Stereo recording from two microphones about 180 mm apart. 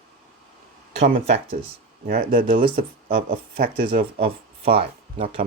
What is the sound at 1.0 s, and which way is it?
Speech, 40° right (ahead or behind).